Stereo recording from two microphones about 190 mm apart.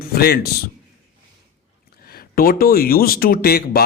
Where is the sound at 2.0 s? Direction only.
50° left (ahead or behind).